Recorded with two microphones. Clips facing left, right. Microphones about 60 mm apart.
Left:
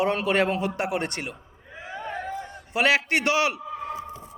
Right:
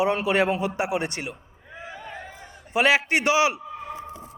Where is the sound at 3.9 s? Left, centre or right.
Right.